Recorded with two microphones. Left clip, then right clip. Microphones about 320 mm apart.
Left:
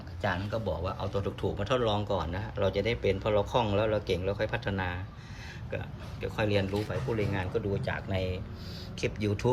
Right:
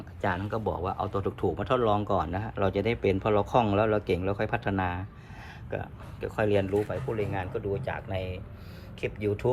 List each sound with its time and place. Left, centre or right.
0.2 s speech: centre